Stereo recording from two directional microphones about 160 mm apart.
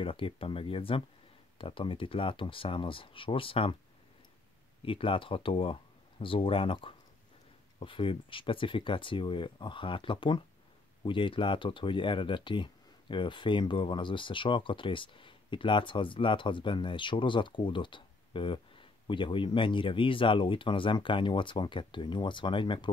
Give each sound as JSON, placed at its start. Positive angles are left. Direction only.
{"t": 0.0, "sound": "speech", "side_deg": 35}
{"t": 4.8, "sound": "speech", "side_deg": 35}